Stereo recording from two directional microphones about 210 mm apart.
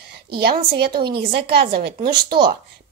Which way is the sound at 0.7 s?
50° right (ahead or behind).